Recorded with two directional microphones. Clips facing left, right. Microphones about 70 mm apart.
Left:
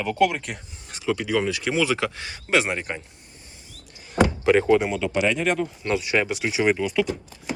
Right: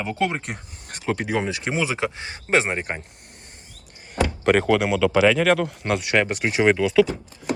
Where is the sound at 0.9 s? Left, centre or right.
Right.